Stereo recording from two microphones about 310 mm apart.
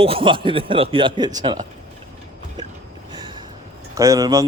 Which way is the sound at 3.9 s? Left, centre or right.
Centre.